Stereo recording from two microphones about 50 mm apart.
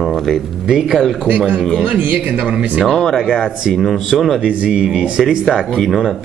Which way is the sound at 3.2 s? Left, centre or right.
Centre.